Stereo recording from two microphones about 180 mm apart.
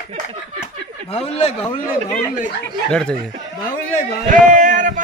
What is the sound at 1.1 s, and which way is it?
Speech, 35° left (ahead or behind).